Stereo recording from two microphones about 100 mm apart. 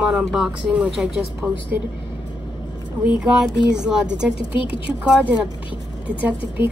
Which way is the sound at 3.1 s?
5° right (ahead or behind).